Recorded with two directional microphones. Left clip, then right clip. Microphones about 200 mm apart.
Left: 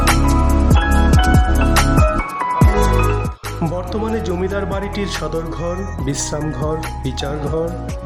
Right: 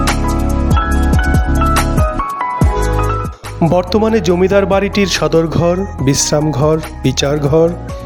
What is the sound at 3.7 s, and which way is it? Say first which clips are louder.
Speech: right 11 dB; 35° right (ahead or behind).